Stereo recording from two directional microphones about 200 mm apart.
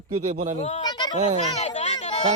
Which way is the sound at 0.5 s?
30° left (ahead or behind).